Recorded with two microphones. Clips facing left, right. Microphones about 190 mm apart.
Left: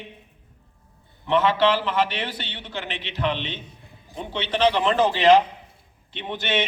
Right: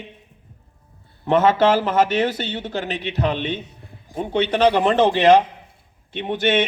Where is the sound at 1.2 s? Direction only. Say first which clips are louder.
Right 4 dB; 45° right (ahead or behind).